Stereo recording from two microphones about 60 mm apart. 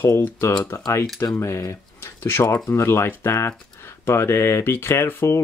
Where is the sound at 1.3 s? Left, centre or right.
Left.